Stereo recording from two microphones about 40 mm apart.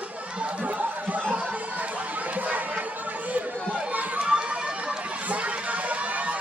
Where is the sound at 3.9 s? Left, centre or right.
Right.